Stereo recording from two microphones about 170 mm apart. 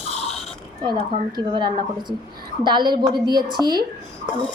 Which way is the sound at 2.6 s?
25° right (ahead or behind).